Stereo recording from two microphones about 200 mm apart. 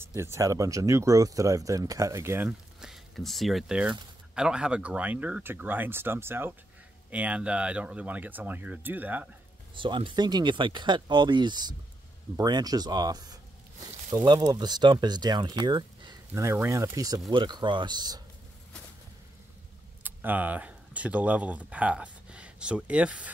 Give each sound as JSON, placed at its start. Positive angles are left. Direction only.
{"t": 0.0, "sound": "speech", "side_deg": -15}
{"t": 9.8, "sound": "speech", "side_deg": -25}
{"t": 20.0, "sound": "speech", "side_deg": -10}